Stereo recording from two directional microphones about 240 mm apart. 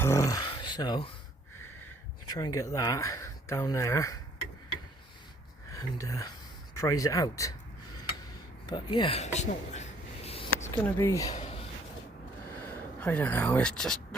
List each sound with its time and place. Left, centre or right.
0.0 s speech: centre
2.2 s speech: centre
5.7 s speech: centre
8.6 s a sound: centre
10.9 s speech: centre
11.3 s a sound: left
12.6 s speech: centre